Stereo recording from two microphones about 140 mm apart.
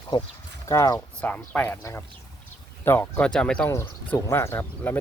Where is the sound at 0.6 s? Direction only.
25° left (ahead or behind).